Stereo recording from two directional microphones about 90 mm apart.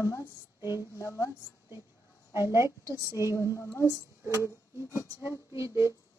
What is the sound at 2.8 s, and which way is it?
A woman's voice, 35° left (ahead or behind).